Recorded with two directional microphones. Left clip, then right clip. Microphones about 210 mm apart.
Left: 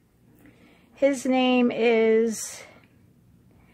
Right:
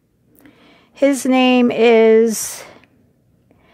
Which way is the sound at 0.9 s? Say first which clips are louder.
Right 7 dB; 45° right (ahead or behind).